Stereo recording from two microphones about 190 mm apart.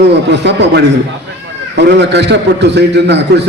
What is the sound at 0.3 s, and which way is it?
A man's voice, 65° right (ahead or behind).